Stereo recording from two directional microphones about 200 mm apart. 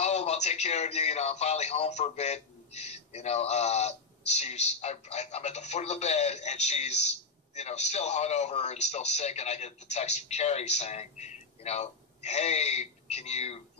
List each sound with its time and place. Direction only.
0.0 s speech: 35° left (ahead or behind)